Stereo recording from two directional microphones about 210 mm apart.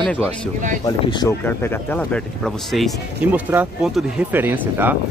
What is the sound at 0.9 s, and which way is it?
Speech, 20° left (ahead or behind).